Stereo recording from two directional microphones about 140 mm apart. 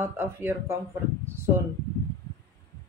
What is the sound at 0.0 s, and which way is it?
Speech, 15° right (ahead or behind).